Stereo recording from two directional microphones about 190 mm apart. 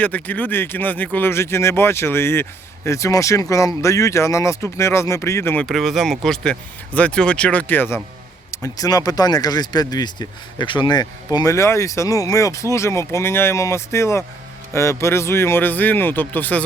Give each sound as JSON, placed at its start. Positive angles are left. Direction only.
{"t": 0.0, "sound": "speech", "side_deg": 10}
{"t": 5.6, "sound": "speech", "side_deg": 0}